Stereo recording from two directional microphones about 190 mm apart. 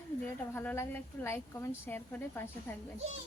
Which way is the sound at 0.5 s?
10° left (ahead or behind).